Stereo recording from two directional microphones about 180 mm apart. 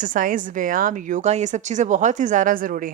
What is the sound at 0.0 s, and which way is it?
Speech, 50° right (ahead or behind).